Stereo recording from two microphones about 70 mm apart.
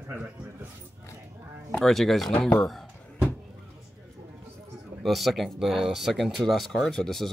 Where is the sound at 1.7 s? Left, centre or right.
Centre.